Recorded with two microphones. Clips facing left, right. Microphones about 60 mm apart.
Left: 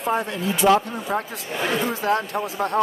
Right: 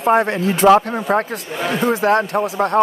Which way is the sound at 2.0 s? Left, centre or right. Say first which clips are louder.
Right 7 dB; right.